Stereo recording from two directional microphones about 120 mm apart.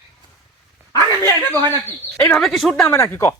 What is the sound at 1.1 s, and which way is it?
Speech, 30° right (ahead or behind).